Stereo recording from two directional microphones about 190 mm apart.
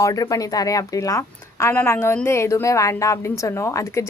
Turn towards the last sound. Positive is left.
turn(degrees=15)  # may be behind; listen again after turning